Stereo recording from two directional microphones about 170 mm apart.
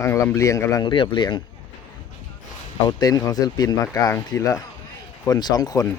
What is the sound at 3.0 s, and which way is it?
Speech, 20° left (ahead or behind).